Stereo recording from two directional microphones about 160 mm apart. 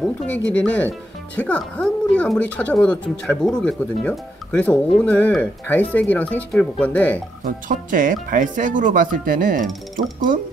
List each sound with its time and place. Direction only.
0.0 s speech: centre (ahead or behind)
7.4 s speech: 55° right (ahead or behind)